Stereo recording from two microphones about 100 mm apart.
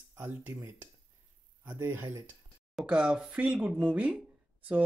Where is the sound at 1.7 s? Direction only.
25° right (ahead or behind).